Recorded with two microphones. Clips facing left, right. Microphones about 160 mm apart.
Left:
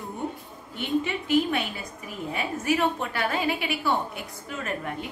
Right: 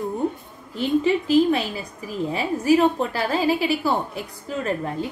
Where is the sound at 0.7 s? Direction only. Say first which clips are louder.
Right 7 dB; 35° right (ahead or behind).